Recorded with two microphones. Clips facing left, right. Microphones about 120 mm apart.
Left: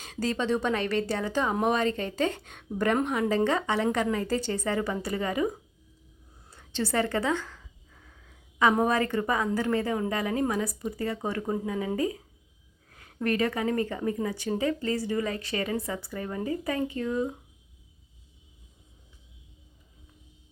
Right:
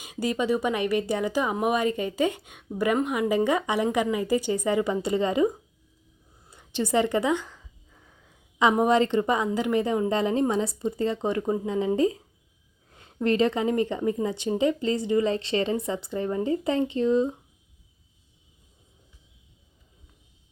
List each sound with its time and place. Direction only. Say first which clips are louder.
0.0 s speech: right 2 dB; 10° right (ahead or behind)
6.5 s a sound: right 4 dB; 15° right (ahead or behind)
9.5 s speech: right 3 dB; 15° right (ahead or behind)